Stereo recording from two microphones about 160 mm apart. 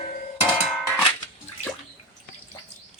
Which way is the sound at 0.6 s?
5° right (ahead or behind).